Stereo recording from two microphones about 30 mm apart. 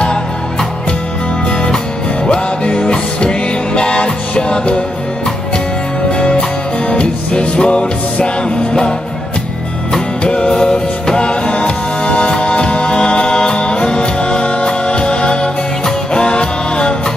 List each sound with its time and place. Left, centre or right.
2.3 s music: left
6.9 s music: left
10.2 s music: left
10.5 s music: left